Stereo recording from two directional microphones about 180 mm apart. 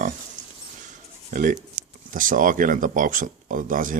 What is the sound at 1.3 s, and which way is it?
Speech, 50° right (ahead or behind).